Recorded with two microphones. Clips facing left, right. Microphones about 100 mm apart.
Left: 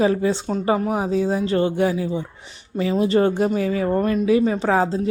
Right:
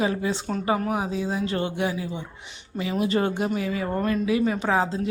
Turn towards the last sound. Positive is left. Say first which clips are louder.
# left 4 dB
turn(degrees=35)  # may be behind; listen again after turning